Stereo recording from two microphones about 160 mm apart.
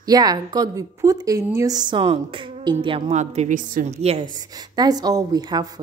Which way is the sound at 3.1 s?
45° right (ahead or behind).